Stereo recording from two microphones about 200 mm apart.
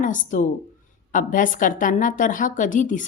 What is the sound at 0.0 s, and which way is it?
Speech, 40° left (ahead or behind).